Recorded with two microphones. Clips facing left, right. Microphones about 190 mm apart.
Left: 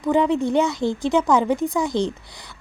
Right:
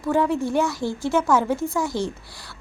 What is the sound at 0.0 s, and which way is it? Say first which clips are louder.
A woman's voice: left 2 dB; 20° left (ahead or behind).